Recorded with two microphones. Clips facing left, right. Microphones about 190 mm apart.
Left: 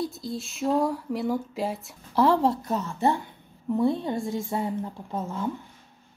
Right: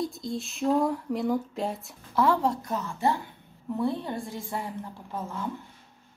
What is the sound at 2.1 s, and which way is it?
A woman's voice, 30° left (ahead or behind).